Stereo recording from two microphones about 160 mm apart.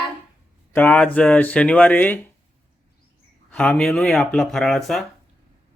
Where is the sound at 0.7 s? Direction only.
10° left (ahead or behind).